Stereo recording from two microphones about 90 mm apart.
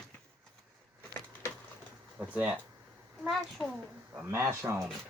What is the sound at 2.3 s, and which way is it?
Speech, 15° right (ahead or behind).